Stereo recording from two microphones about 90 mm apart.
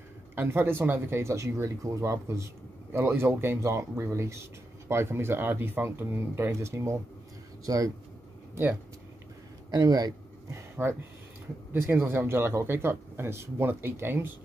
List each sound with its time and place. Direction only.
0.4 s speech: 25° right (ahead or behind)
9.7 s speech: 45° right (ahead or behind)
10.5 s a sound: 25° right (ahead or behind)
11.7 s speech: 25° right (ahead or behind)